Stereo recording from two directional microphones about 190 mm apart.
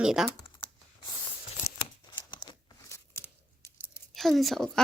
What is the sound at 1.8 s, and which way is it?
Tearing, 25° left (ahead or behind).